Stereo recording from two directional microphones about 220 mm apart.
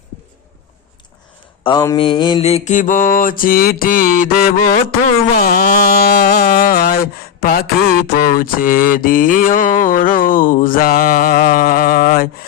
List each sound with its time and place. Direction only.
1.6 s mantra: 20° left (ahead or behind); by 4.5 s 40° left (ahead or behind)
4.7 s a sound: 40° left (ahead or behind)
8.1 s mantra: 40° left (ahead or behind)